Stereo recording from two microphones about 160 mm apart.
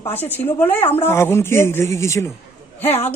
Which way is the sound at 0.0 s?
10° left (ahead or behind).